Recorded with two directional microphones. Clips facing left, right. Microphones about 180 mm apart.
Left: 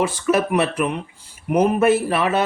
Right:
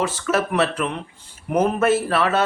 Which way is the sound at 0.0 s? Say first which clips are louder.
Left 3 dB; 15° left (ahead or behind).